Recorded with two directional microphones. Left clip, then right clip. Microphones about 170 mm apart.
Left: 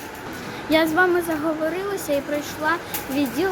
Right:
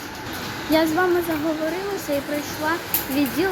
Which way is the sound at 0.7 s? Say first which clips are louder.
Left 1 dB; 10° left (ahead or behind).